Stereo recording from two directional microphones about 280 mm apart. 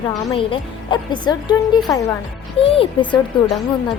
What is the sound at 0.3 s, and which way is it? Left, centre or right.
A woman's voice, centre.